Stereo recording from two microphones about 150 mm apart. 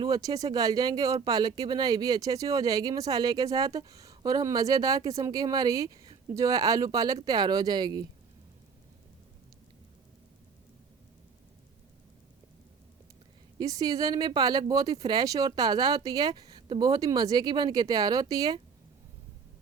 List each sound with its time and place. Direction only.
0.0 s speech: 25° right (ahead or behind)
13.6 s speech: 25° right (ahead or behind)